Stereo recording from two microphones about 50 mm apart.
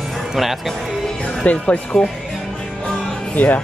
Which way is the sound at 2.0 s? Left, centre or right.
Centre.